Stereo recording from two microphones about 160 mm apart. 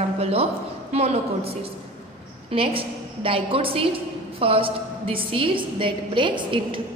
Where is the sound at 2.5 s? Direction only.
35° right (ahead or behind).